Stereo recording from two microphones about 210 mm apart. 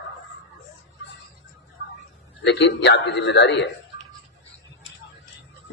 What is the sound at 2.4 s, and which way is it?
A man's voice, 55° left (ahead or behind).